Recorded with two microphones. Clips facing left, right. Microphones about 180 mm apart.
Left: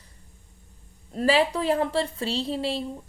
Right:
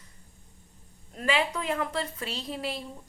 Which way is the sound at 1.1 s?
35° left (ahead or behind).